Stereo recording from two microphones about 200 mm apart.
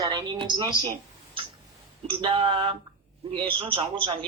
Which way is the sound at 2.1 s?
25° right (ahead or behind).